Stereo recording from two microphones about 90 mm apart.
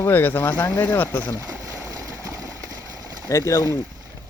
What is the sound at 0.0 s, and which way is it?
Speech, 25° left (ahead or behind).